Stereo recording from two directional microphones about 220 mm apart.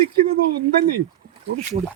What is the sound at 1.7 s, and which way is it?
Speech, 30° right (ahead or behind).